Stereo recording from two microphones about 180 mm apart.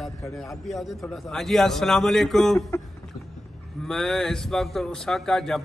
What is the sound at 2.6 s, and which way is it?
Speech, 15° left (ahead or behind).